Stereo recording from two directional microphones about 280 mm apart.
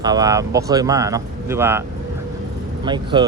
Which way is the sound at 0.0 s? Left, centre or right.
Centre.